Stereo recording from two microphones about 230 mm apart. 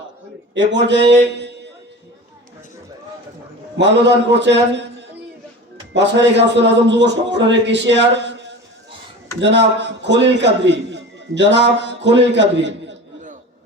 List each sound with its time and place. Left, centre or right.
0.5 s a man's voice: right
3.8 s a man's voice: right
5.9 s a man's voice: right